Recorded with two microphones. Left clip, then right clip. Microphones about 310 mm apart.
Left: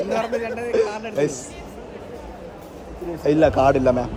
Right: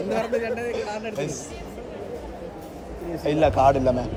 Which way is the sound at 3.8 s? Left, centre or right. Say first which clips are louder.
Left 4 dB; left.